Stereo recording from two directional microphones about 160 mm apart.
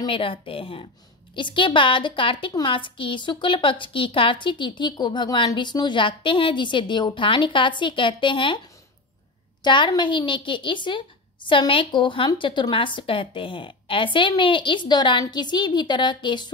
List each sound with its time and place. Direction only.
0.0 s a woman's voice: 35° left (ahead or behind)
9.6 s a woman's voice: 30° left (ahead or behind)